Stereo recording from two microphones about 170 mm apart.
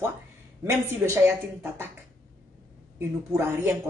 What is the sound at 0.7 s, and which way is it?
Speech, 15° right (ahead or behind).